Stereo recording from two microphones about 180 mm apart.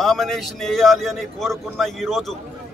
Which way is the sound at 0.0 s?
Centre (ahead or behind).